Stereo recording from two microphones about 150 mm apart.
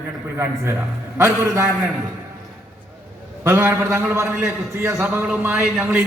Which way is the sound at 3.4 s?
15° right (ahead or behind).